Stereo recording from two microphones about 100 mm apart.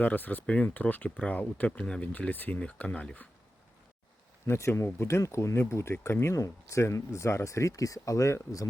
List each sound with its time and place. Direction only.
0.0 s speech: 15° left (ahead or behind)
4.4 s speech: 25° left (ahead or behind)